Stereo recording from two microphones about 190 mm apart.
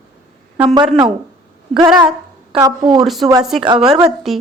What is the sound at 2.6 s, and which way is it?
Speech, 20° right (ahead or behind).